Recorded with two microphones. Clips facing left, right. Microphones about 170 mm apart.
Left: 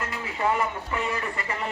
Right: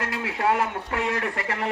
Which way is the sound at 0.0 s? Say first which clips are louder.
Right 2 dB; 75° right (ahead or behind).